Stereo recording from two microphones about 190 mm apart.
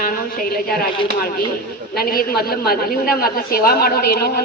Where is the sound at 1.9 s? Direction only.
50° left (ahead or behind).